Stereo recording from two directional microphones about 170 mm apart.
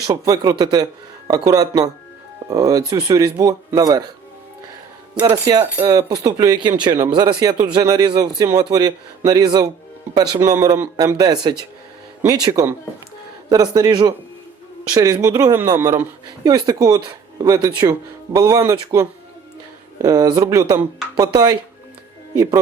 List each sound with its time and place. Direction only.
0.1 s speech: 20° right (ahead or behind)
5.2 s speech: 25° right (ahead or behind)